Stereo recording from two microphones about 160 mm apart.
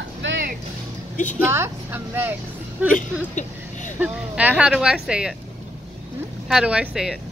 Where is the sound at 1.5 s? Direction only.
15° right (ahead or behind).